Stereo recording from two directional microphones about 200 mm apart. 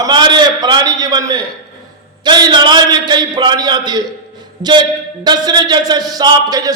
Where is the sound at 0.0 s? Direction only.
20° right (ahead or behind).